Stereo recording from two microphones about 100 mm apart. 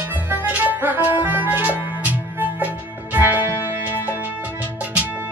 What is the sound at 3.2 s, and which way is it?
Music, 20° right (ahead or behind).